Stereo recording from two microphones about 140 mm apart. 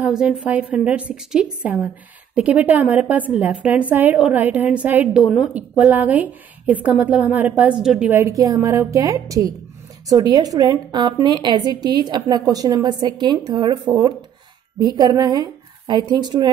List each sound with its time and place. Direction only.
0.0 s a woman's voice: 5° right (ahead or behind)
8.1 s a woman's voice: 20° right (ahead or behind)